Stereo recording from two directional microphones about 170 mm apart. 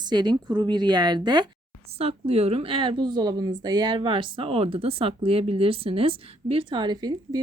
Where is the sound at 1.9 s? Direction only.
35° right (ahead or behind).